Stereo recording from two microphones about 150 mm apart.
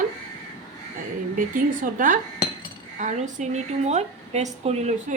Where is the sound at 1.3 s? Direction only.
65° right (ahead or behind).